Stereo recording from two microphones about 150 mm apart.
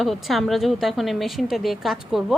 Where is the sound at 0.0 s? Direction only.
Centre (ahead or behind).